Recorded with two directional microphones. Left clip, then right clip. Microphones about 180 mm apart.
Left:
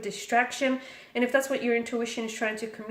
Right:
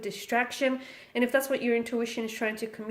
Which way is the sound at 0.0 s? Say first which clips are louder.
Left 3 dB; 40° right (ahead or behind).